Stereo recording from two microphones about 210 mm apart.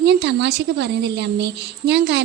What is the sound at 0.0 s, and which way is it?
A woman's voice, 55° right (ahead or behind).